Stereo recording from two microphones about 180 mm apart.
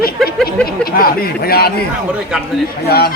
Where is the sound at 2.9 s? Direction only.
60° left (ahead or behind).